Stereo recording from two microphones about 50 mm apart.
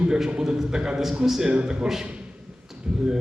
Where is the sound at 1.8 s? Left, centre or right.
Centre.